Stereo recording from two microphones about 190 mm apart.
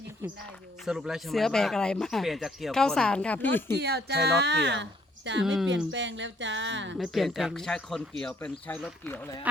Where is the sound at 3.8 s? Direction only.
60° right (ahead or behind).